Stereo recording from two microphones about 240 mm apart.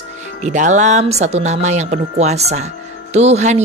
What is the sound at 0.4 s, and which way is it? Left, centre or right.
Speech, right.